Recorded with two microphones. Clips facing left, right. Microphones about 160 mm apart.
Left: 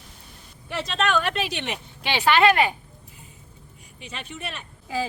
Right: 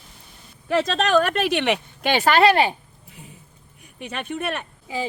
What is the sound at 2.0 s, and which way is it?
Speech, 50° right (ahead or behind).